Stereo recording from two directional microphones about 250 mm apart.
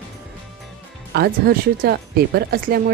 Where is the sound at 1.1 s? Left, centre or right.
Right.